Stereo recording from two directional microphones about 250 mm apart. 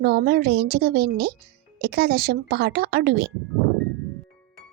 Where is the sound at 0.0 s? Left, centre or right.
Right.